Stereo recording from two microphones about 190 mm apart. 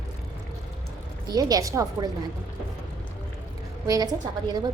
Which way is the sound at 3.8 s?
20° right (ahead or behind).